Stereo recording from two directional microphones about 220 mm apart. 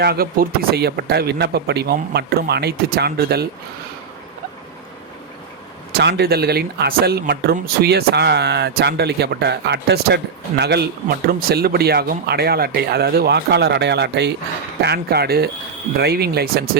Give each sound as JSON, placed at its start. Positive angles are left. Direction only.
{"t": 0.0, "sound": "speech", "side_deg": -45}
{"t": 5.9, "sound": "speech", "side_deg": -50}